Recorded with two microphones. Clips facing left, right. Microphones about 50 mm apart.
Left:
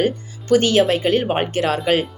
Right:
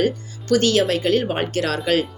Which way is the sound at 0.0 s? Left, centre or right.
Left.